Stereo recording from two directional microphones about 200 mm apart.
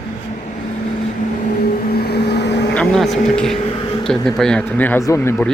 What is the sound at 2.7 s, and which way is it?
Speech, centre (ahead or behind).